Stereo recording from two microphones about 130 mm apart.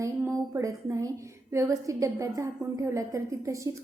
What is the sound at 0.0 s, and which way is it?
Speech, 25° right (ahead or behind).